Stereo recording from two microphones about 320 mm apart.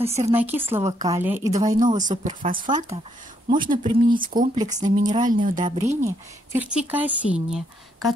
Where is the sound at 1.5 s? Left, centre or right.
Right.